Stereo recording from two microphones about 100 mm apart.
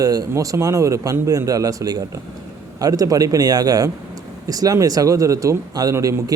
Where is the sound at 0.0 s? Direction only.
35° right (ahead or behind).